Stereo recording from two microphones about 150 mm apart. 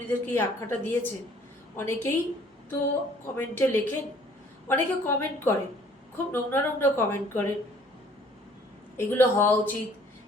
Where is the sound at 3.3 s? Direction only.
15° left (ahead or behind).